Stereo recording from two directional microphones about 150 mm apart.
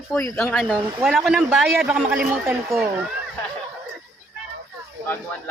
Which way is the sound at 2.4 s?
15° right (ahead or behind).